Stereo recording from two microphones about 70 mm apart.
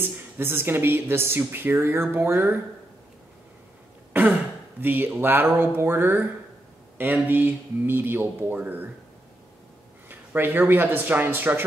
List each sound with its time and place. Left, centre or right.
0.0 s speech: right
4.1 s throat clearing: right
4.8 s speech: right
10.0 s a man's voice: right